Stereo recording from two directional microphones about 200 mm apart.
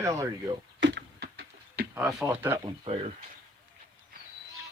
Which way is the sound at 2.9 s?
30° right (ahead or behind).